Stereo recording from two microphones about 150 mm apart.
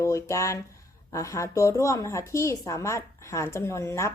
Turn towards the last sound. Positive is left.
turn(degrees=20)  # may be behind; listen again after turning